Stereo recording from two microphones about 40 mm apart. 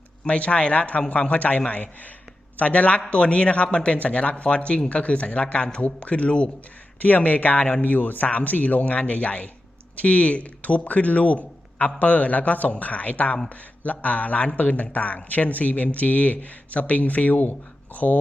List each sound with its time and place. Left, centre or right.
0.3 s speech: left
7.0 s speech: left